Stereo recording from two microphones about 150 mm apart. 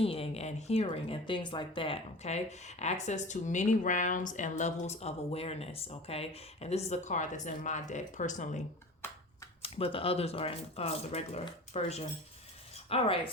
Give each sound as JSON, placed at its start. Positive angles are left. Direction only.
{"t": 0.0, "sound": "speech", "side_deg": 40}
{"t": 9.6, "sound": "speech", "side_deg": 40}